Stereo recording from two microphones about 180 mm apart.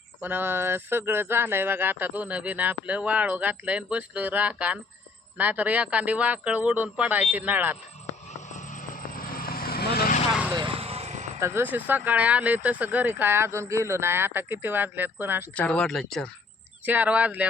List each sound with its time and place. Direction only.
0.2 s speech: 10° right (ahead or behind)
8.5 s vehicle: 45° left (ahead or behind)
10.5 s basketball bounce: 25° right (ahead or behind)
11.3 s speech: 15° right (ahead or behind)
15.5 s speech: 5° left (ahead or behind)
16.8 s speech: 10° right (ahead or behind)